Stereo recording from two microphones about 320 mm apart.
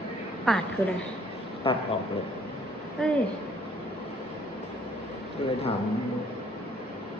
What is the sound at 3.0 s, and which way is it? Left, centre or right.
Speech, centre.